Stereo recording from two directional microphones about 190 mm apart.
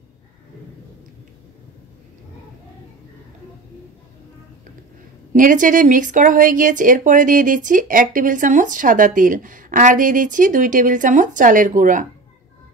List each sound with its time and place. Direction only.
5.3 s speech: 45° right (ahead or behind)